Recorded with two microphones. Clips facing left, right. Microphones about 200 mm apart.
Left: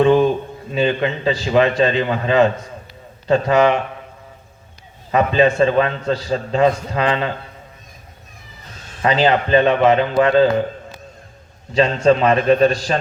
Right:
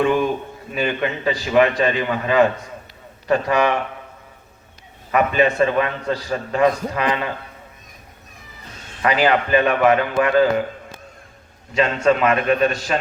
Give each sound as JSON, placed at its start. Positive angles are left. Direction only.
{"t": 0.0, "sound": "a man's voice", "side_deg": 30}
{"t": 5.1, "sound": "a man's voice", "side_deg": 25}
{"t": 9.0, "sound": "a man's voice", "side_deg": 25}
{"t": 12.0, "sound": "a man's voice", "side_deg": 30}